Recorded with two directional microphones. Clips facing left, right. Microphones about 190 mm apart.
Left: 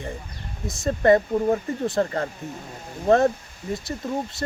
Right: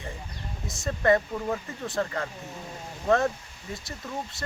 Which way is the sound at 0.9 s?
35° left (ahead or behind).